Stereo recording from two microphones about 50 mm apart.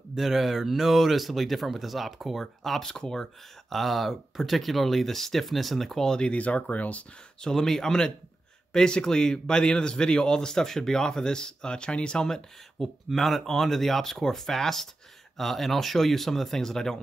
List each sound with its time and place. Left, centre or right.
0.1 s speech: centre
6.3 s speech: left
7.4 s a man's voice: centre